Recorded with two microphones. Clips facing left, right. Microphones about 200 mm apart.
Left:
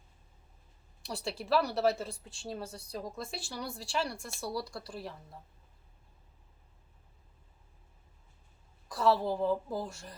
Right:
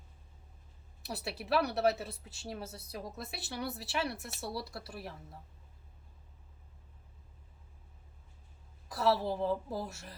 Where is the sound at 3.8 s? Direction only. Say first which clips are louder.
Left 1 dB; 5° right (ahead or behind).